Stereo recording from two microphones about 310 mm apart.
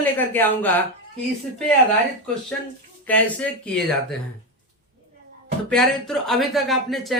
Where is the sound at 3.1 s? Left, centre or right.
Centre.